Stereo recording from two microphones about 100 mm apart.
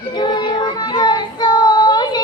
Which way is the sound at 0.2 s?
45° left (ahead or behind).